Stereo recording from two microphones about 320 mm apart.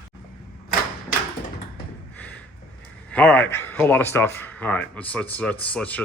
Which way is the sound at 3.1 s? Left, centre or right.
Centre.